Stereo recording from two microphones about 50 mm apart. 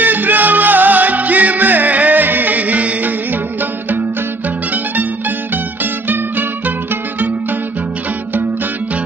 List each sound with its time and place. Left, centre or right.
0.0 s music: right
5.8 s music: right